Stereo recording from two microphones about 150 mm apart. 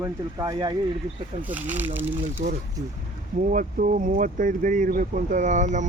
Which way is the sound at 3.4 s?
60° right (ahead or behind).